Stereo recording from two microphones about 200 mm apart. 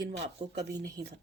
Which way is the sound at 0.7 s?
20° right (ahead or behind).